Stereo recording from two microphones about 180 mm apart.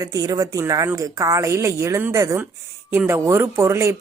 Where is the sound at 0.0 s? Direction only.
20° right (ahead or behind).